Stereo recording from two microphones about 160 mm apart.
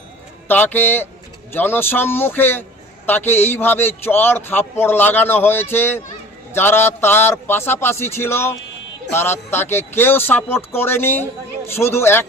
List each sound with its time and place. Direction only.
0.4 s speech: 10° left (ahead or behind)